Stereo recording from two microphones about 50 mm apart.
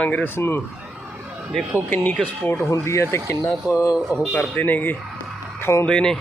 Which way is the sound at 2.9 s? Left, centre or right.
Left.